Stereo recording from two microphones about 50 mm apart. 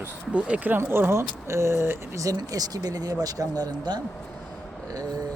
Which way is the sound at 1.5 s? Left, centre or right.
Right.